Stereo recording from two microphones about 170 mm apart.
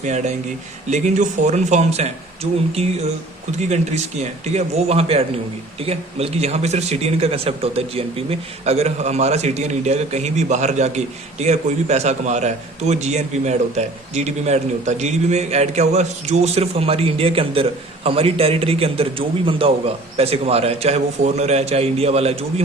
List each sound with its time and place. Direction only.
0.0 s speech: 45° right (ahead or behind)